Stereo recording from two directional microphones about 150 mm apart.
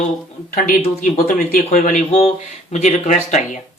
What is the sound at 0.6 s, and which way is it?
Speech, 65° left (ahead or behind).